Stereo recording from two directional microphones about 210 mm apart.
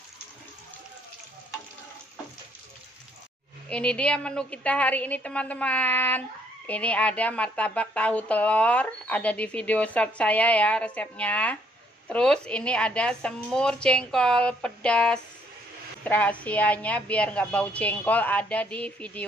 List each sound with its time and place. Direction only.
3.6 s speech: 5° left (ahead or behind)